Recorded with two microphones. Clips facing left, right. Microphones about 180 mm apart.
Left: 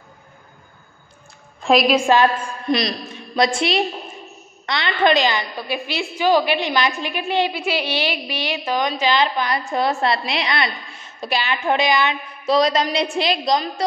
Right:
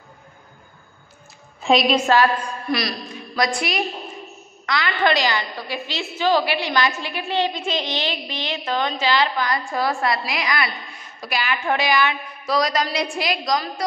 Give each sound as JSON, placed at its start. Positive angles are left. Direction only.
{"t": 1.6, "sound": "a woman's voice", "side_deg": 0}
{"t": 2.1, "sound": "a woman's voice", "side_deg": 20}